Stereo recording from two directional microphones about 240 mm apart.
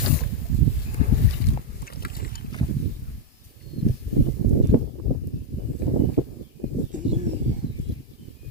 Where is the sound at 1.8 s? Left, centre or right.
Left.